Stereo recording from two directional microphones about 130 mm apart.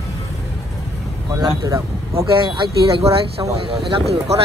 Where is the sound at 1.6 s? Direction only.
20° right (ahead or behind).